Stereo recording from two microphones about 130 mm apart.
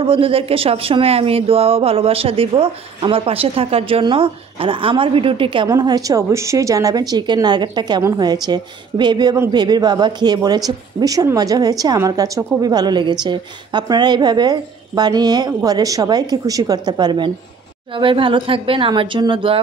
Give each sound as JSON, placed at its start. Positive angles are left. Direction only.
{"t": 0.0, "sound": "speech", "side_deg": -45}
{"t": 5.7, "sound": "a woman's voice", "side_deg": -30}